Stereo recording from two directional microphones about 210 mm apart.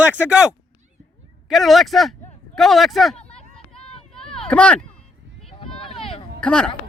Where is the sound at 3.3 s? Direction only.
30° left (ahead or behind).